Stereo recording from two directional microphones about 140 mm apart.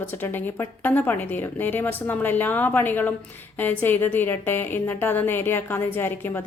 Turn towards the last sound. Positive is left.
turn(degrees=15)  # may be behind; listen again after turning